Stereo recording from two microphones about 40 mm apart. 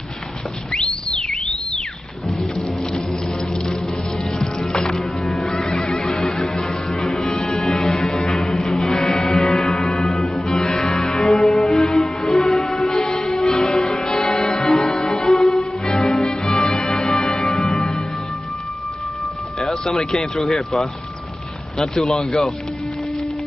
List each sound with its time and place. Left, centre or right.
0.7 s whistle: centre
4.2 s music: centre
7.4 s music: centre
10.4 s music: centre
11.0 s music: centre
12.5 s music: centre
15.2 s music: centre
15.5 s music: centre
17.6 s music: centre
19.7 s speech: centre